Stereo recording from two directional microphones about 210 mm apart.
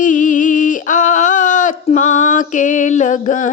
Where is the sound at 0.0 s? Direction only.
35° left (ahead or behind).